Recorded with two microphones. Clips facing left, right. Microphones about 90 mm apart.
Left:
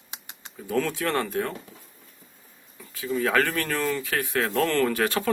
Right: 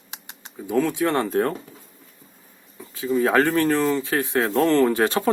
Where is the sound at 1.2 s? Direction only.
40° right (ahead or behind).